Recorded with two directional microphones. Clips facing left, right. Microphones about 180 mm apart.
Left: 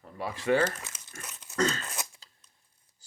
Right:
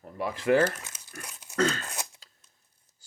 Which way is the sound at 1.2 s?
10° right (ahead or behind).